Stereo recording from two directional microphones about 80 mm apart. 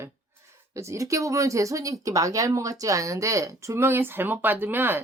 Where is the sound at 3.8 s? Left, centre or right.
Right.